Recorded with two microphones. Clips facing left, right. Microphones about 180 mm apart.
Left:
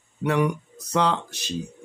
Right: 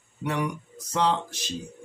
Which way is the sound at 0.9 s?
65° left (ahead or behind).